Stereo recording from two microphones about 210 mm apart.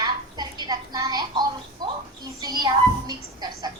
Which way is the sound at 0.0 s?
20° right (ahead or behind).